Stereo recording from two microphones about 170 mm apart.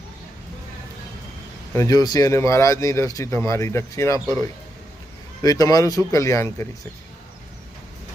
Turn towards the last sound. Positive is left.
turn(degrees=15)  # may be behind; listen again after turning